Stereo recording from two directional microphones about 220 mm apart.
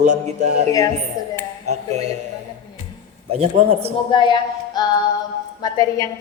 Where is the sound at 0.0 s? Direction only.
30° right (ahead or behind).